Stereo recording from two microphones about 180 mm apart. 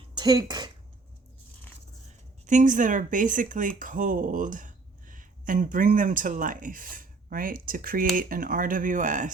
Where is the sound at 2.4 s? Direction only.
45° right (ahead or behind).